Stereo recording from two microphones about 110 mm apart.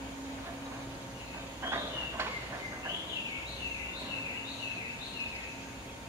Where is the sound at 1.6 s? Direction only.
25° right (ahead or behind).